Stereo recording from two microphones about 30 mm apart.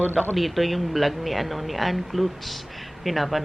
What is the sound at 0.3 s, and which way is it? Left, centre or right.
Speech, centre.